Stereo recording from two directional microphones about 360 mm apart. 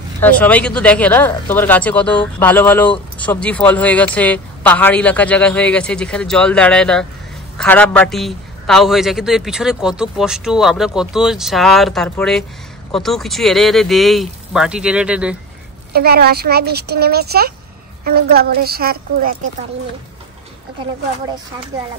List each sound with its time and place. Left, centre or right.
0.2 s speech: centre
15.9 s speech: right